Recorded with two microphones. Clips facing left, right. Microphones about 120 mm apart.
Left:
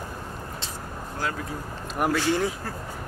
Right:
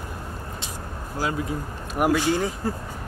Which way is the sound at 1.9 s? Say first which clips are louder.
Right 3 dB; 10° right (ahead or behind).